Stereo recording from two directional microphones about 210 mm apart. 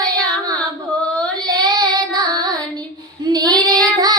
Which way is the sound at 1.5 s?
20° right (ahead or behind).